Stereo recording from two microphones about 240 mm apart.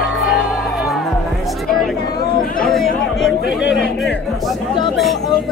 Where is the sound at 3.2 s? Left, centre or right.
Centre.